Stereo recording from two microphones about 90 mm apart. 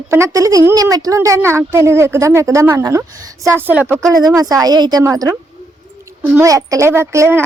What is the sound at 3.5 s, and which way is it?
Speech, 25° right (ahead or behind).